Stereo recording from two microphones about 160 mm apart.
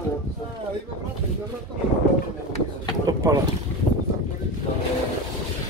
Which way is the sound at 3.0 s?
20° right (ahead or behind).